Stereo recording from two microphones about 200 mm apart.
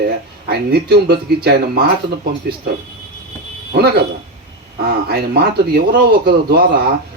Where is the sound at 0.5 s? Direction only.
55° right (ahead or behind).